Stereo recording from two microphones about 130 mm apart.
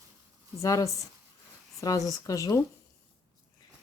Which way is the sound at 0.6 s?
25° left (ahead or behind).